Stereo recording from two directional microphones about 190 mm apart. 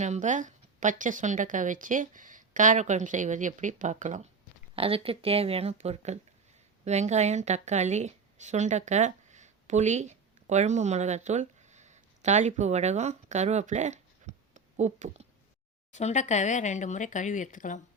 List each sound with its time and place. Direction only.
0.0 s speech: 40° right (ahead or behind)
4.7 s a woman's voice: 30° right (ahead or behind)
15.9 s speech: 40° left (ahead or behind)